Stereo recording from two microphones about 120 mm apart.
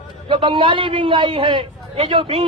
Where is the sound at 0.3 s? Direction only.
45° right (ahead or behind).